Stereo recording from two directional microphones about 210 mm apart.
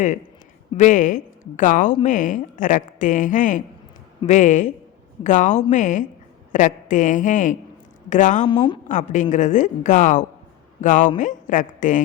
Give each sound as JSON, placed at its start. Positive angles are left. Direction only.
{"t": 0.8, "sound": "a woman's voice", "side_deg": 35}
{"t": 8.4, "sound": "speech", "side_deg": 20}
{"t": 8.9, "sound": "a woman's voice", "side_deg": 35}